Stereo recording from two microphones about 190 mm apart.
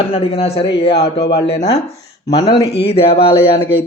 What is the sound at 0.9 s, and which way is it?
Speech, 60° left (ahead or behind).